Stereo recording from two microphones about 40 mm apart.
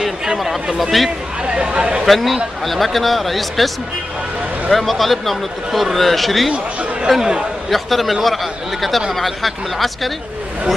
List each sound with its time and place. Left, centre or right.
0.0 s a sound: centre
0.9 s speech: centre
1.4 s a sound: right
2.0 s speech: centre
6.5 s chatter: right
7.7 s speech: centre